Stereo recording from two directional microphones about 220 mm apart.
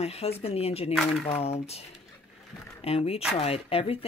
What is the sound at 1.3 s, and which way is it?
Speech, 30° left (ahead or behind).